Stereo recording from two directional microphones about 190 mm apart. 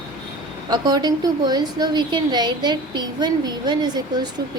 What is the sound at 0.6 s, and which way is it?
A woman's voice, 20° right (ahead or behind).